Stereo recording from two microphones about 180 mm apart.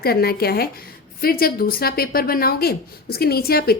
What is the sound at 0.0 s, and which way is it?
A woman's voice, 60° left (ahead or behind).